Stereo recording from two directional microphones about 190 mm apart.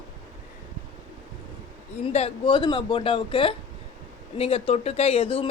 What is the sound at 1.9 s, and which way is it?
Speech, 35° left (ahead or behind).